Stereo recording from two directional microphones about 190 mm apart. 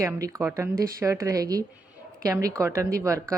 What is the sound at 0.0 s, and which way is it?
A woman's voice, 15° right (ahead or behind).